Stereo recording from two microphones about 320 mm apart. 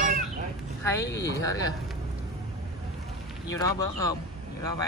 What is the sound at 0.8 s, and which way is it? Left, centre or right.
Speech, centre.